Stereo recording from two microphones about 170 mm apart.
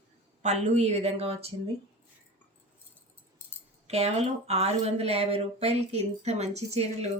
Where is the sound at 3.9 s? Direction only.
40° right (ahead or behind).